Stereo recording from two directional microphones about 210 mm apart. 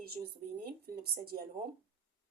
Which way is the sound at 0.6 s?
45° right (ahead or behind).